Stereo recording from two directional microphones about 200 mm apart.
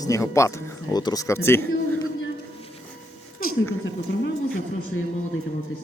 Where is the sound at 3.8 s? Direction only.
60° left (ahead or behind).